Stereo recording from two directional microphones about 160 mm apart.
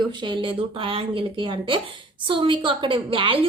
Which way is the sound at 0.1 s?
30° right (ahead or behind).